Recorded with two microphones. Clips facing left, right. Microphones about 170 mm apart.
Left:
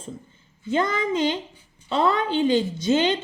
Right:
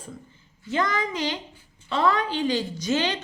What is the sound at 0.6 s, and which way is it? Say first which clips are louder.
A woman's voice: left 3 dB; 25° left (ahead or behind).